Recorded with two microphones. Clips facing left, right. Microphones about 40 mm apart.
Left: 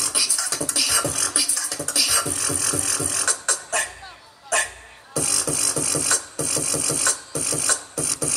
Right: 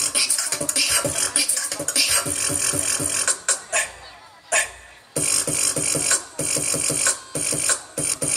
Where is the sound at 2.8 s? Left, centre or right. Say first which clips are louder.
Even; right.